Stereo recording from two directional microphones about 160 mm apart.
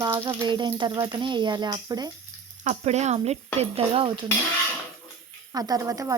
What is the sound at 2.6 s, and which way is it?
Speech, 45° right (ahead or behind).